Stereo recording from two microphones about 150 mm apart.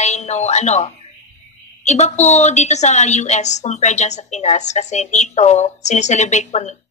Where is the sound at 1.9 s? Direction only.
50° left (ahead or behind).